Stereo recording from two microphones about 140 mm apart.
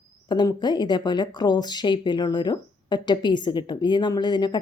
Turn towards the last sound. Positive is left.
turn(degrees=30)  # may be behind; listen again after turning